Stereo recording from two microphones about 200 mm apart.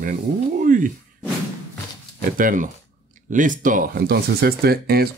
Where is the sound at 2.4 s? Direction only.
40° right (ahead or behind).